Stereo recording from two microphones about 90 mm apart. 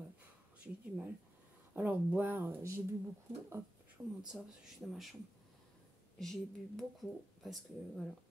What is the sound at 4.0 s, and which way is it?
Speech, 10° right (ahead or behind).